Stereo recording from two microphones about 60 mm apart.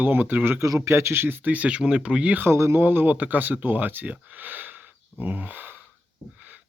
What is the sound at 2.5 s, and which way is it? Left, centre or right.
Speech, right.